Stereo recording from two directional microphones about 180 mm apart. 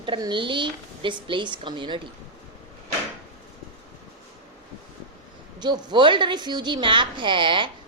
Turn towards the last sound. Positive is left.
turn(degrees=-25)  # may be behind; listen again after turning